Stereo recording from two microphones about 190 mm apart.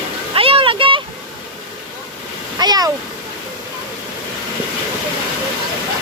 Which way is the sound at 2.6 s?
20° right (ahead or behind).